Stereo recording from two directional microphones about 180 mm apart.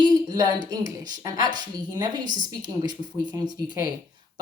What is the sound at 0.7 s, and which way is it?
A woman's voice, 20° right (ahead or behind).